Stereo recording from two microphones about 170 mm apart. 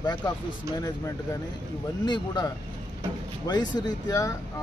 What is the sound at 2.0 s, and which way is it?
Speech, 25° left (ahead or behind).